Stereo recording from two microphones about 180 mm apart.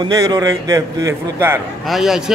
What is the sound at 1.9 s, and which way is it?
Speech, centre (ahead or behind).